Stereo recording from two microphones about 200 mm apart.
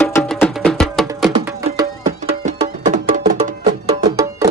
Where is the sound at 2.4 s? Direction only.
40° right (ahead or behind).